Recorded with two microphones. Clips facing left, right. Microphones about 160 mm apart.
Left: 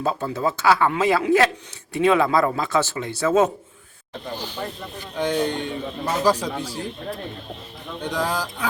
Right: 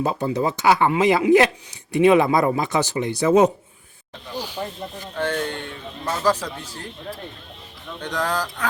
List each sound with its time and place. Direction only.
0.0 s speech: 15° right (ahead or behind)
4.4 s snake: 10° right (ahead or behind)
5.1 s speech: 15° left (ahead or behind)
8.0 s speech: 10° left (ahead or behind)